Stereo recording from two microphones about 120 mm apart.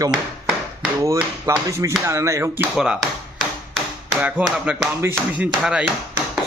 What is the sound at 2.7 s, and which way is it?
Speech, 5° right (ahead or behind).